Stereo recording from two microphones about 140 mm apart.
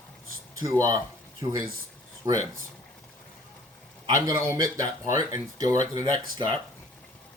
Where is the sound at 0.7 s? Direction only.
25° right (ahead or behind).